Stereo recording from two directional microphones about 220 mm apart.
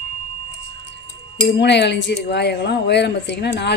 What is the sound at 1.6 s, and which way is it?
Speech, 50° left (ahead or behind).